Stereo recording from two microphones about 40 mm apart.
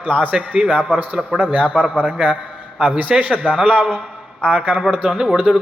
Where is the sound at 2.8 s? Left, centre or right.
Right.